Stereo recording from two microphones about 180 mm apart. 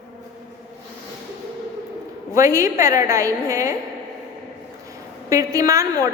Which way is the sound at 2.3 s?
20° right (ahead or behind).